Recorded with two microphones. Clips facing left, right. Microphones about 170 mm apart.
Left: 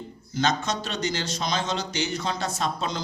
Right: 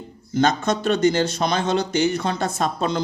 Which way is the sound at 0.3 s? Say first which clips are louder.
Right 6 dB; 55° right (ahead or behind).